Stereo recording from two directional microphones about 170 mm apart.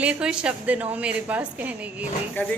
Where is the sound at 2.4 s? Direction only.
10° left (ahead or behind).